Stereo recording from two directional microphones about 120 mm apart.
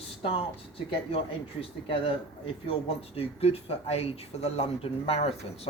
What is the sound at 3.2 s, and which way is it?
Speech, 55° left (ahead or behind).